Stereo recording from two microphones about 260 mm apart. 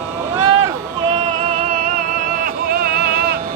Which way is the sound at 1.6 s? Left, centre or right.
Right.